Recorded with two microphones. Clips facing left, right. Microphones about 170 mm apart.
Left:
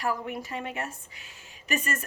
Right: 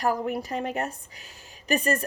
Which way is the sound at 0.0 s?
40° right (ahead or behind).